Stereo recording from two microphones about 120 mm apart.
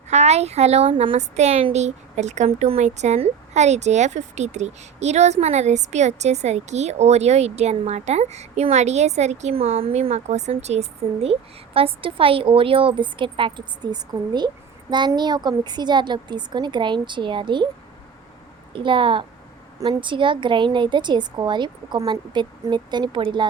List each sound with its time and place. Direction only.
0.1 s speech: 65° right (ahead or behind); by 17.7 s 40° right (ahead or behind)
18.7 s a woman's voice: 45° right (ahead or behind)